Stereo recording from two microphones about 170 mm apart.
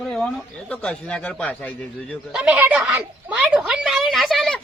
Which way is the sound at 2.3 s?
10° right (ahead or behind).